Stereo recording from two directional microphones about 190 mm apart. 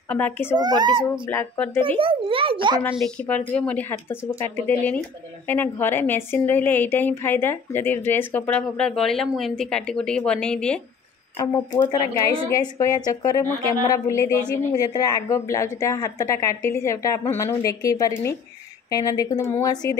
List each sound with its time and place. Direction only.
0.1 s a woman's voice: 10° left (ahead or behind)
0.6 s a child's voice: 20° right (ahead or behind)
1.3 s a woman's voice: 15° left (ahead or behind)
1.8 s a child's voice: 30° right (ahead or behind)
2.8 s a woman's voice: 5° left (ahead or behind)
11.3 s a woman's voice: 15° left (ahead or behind)